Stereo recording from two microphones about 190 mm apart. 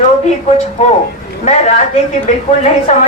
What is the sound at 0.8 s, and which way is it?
A woman's voice, 35° left (ahead or behind).